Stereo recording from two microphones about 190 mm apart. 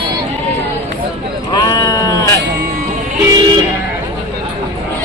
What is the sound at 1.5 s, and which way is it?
Sheep, 20° left (ahead or behind).